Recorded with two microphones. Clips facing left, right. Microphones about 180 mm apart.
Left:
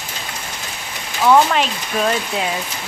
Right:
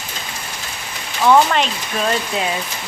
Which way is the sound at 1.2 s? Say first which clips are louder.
Even; 5° left (ahead or behind).